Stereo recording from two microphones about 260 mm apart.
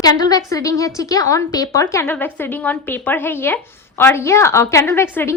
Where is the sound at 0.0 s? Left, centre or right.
Centre.